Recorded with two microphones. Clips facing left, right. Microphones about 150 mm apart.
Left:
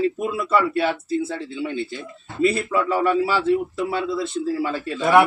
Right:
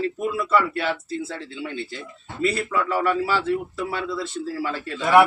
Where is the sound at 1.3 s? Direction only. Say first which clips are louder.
Left 5 dB; 15° left (ahead or behind).